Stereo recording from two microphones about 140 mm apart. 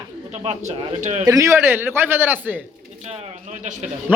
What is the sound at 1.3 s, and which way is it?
A man's voice, 20° right (ahead or behind).